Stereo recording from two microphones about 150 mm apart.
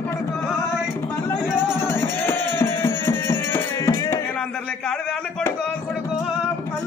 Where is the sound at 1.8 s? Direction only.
15° left (ahead or behind).